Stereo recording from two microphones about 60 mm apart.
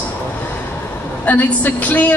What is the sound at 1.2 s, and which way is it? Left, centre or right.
Speech, left.